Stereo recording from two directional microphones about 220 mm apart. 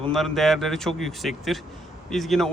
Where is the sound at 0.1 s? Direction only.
Centre (ahead or behind).